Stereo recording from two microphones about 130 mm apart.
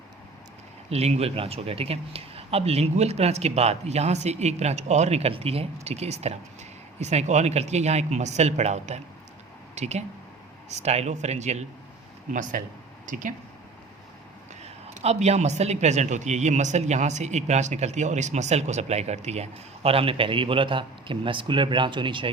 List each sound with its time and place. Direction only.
0.9 s speech: 55° right (ahead or behind)
12.3 s speech: 80° right
14.6 s speech: 55° right (ahead or behind); by 22.3 s 40° right (ahead or behind)